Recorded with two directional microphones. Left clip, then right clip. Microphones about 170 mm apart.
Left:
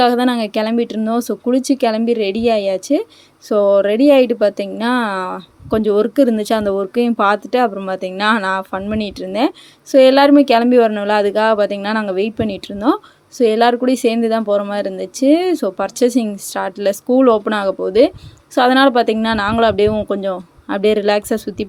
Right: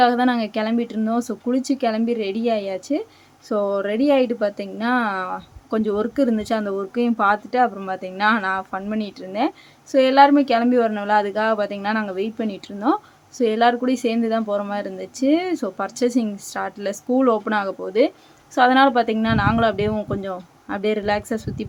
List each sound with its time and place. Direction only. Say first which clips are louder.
0.0 s speech: left 3 dB; 35° left (ahead or behind)